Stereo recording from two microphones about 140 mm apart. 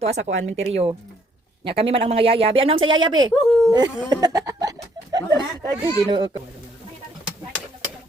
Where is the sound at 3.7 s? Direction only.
30° right (ahead or behind).